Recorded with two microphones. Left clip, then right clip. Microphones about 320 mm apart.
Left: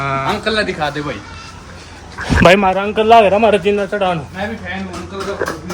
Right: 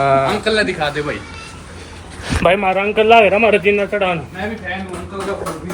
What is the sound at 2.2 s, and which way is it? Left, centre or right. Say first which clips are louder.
Speech: left 5 dB; left.